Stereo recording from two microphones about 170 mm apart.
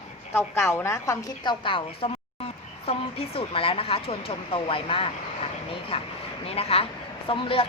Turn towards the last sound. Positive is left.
turn(degrees=30)  # may be behind; listen again after turning